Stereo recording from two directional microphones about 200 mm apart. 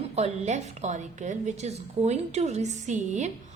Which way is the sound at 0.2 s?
35° right (ahead or behind).